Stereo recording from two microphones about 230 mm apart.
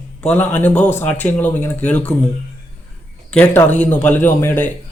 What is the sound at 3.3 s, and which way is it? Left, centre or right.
Speech, centre.